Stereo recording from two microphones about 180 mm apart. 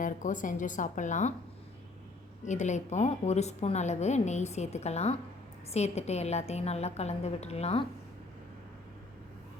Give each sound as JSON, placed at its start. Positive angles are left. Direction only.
{"t": 0.0, "sound": "speech", "side_deg": 45}
{"t": 2.4, "sound": "a woman's voice", "side_deg": 40}